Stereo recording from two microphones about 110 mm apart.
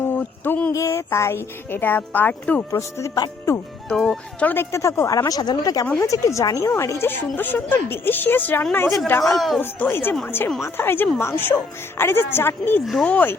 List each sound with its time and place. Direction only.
0.0 s a sound: 20° left (ahead or behind)
0.7 s speech: 30° left (ahead or behind)
2.7 s speech: 30° left (ahead or behind)
3.8 s speech: 5° left (ahead or behind)
4.4 s a woman's voice: 20° left (ahead or behind)
12.8 s a woman's voice: 5° left (ahead or behind)